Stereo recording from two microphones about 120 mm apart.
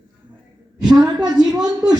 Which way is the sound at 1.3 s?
5° right (ahead or behind).